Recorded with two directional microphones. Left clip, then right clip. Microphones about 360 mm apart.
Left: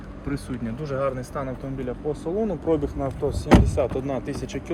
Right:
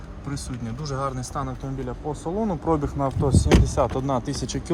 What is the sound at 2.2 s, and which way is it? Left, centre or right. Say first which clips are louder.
Speech: right 1 dB; centre.